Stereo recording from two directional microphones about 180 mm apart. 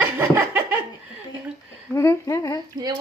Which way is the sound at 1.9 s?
15° left (ahead or behind).